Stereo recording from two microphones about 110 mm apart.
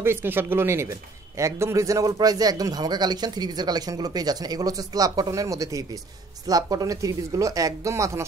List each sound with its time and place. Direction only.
0.0 s a man's voice: 20° right (ahead or behind)